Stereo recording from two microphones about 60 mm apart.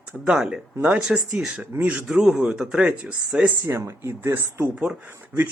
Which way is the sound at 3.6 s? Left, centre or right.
Right.